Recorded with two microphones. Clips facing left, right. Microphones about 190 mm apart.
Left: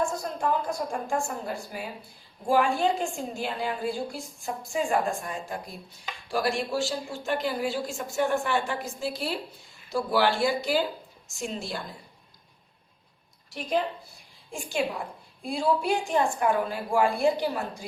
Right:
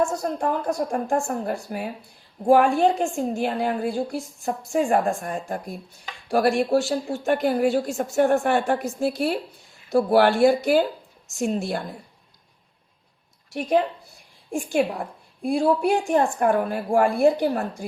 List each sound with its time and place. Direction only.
0.3 s a woman's voice: 60° right (ahead or behind)
13.5 s a woman's voice: 50° right (ahead or behind)